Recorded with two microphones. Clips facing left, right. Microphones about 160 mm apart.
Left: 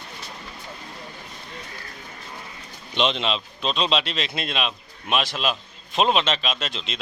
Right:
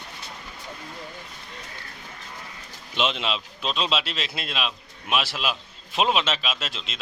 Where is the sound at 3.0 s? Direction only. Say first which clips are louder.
Left 3 dB; 5° right (ahead or behind).